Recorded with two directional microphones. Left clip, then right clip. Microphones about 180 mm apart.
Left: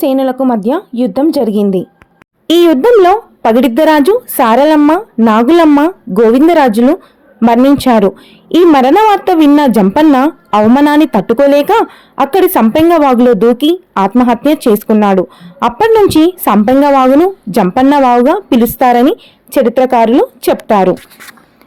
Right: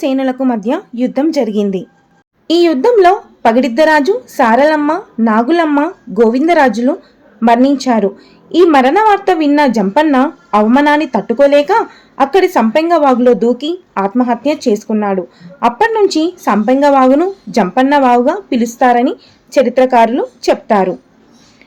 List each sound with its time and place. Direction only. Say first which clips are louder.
0.0 s speech: left 3 dB; 30° left (ahead or behind)
2.8 s a woman's voice: left 2 dB; 45° left (ahead or behind)